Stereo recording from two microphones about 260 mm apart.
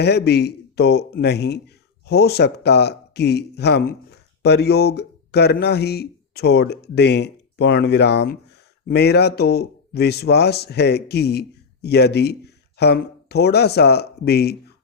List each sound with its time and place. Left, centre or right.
0.0 s speech: left